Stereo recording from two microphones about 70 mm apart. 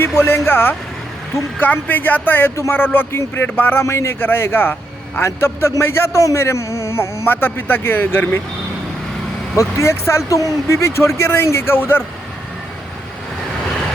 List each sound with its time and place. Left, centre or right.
0.2 s a man's voice: left
3.8 s a man's voice: left
5.2 s a man's voice: left
9.6 s a man's voice: left